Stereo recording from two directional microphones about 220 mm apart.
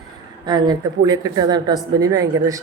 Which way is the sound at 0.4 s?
20° right (ahead or behind).